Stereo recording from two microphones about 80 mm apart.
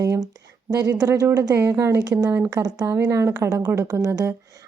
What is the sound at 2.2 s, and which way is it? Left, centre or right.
A woman's voice, right.